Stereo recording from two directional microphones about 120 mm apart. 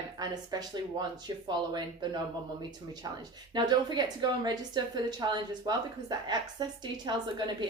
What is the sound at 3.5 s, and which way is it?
A woman's voice, 35° right (ahead or behind).